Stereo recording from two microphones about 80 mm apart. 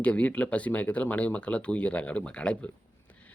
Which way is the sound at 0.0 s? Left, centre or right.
Centre.